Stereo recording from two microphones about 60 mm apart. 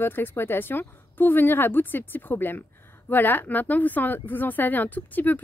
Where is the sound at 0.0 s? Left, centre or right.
Left.